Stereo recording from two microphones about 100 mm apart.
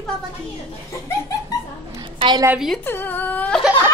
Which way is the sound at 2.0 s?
55° right (ahead or behind).